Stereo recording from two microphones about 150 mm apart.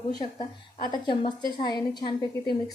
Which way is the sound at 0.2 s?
30° left (ahead or behind).